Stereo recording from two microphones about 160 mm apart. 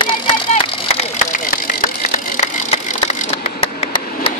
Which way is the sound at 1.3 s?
60° left (ahead or behind).